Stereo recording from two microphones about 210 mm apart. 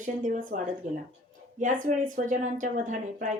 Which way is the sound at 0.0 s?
35° right (ahead or behind).